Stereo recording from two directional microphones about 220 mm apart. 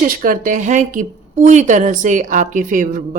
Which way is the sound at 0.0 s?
40° right (ahead or behind).